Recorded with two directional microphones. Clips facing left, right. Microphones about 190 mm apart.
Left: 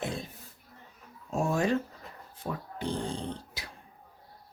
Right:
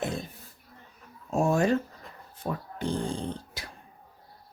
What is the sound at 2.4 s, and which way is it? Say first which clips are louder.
Speech: right 3 dB; 65° right (ahead or behind).